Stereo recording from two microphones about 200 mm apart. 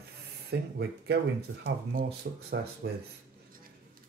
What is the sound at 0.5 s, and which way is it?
Speech, 55° right (ahead or behind).